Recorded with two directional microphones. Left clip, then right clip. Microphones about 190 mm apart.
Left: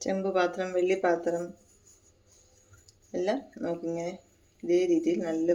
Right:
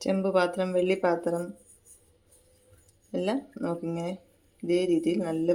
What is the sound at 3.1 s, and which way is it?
Speech, 35° right (ahead or behind).